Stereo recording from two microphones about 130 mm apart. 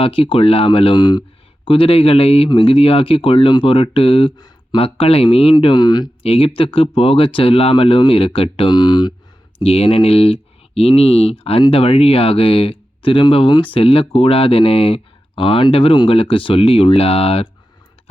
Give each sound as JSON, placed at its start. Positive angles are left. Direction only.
{"t": 0.0, "sound": "speech", "side_deg": 45}
{"t": 1.6, "sound": "speech", "side_deg": 45}
{"t": 4.8, "sound": "speech", "side_deg": 50}
{"t": 6.2, "sound": "speech", "side_deg": 50}
{"t": 9.6, "sound": "speech", "side_deg": 50}